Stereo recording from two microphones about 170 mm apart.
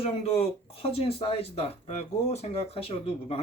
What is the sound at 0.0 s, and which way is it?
Speech, 35° left (ahead or behind).